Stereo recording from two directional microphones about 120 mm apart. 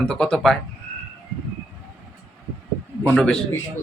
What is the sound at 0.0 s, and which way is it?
Speech, 5° left (ahead or behind).